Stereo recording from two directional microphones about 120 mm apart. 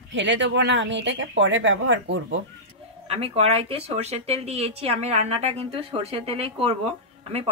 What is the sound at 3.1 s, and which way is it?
Speech, 55° right (ahead or behind).